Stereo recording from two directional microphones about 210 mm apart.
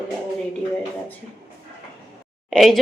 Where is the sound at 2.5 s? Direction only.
Centre (ahead or behind).